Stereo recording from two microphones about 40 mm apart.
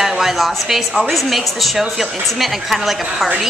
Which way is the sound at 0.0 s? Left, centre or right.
Centre.